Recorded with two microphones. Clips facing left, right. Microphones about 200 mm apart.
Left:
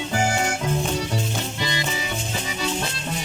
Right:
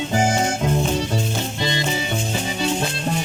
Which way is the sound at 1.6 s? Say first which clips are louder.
Right 5 dB; 25° right (ahead or behind).